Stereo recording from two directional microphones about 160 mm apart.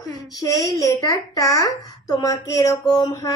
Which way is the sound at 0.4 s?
20° left (ahead or behind).